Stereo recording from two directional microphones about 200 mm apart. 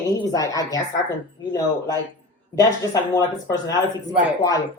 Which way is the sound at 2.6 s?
20° left (ahead or behind).